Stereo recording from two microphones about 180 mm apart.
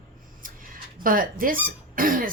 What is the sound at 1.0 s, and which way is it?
A woman's voice, 50° right (ahead or behind).